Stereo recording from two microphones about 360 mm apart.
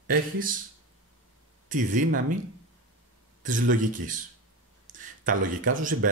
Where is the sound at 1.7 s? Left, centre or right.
Right.